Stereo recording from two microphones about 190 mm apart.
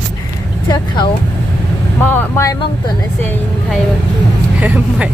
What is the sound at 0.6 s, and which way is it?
Speech, 25° left (ahead or behind).